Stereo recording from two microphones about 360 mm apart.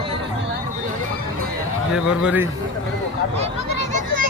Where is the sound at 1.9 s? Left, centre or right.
Centre.